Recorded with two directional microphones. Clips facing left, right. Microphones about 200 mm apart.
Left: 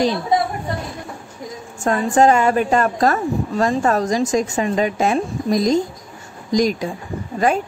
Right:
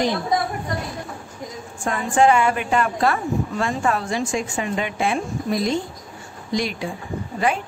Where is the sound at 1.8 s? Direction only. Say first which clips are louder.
Left 3 dB; 40° left (ahead or behind).